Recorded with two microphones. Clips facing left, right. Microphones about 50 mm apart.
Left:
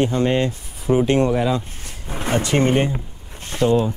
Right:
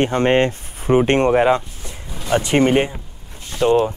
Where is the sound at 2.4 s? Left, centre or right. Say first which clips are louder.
Right 3 dB; right.